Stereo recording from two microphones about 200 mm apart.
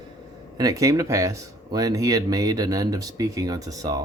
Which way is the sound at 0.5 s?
15° right (ahead or behind).